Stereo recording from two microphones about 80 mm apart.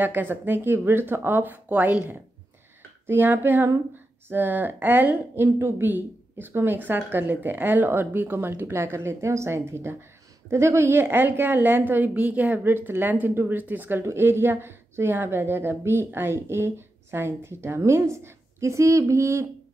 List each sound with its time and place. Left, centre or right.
0.0 s a woman's voice: right